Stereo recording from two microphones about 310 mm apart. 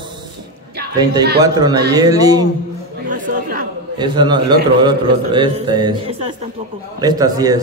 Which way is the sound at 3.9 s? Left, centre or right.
Centre.